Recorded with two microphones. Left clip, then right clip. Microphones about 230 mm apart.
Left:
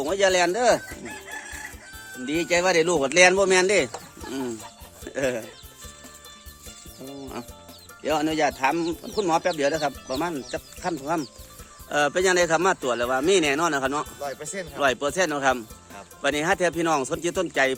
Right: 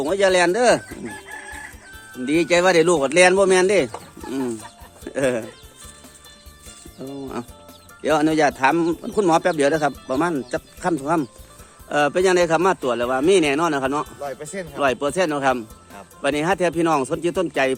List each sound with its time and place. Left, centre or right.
0.0 s speech: centre
0.8 s chicken: centre
2.2 s speech: centre
7.0 s music: centre
8.0 s speech: centre